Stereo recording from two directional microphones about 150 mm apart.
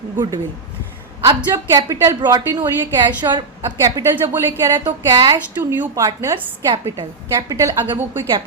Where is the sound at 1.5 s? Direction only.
20° right (ahead or behind).